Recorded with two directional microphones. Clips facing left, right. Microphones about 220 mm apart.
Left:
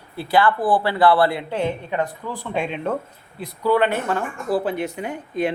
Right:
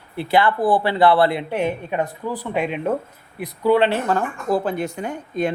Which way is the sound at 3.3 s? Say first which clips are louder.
Right 2 dB; 20° right (ahead or behind).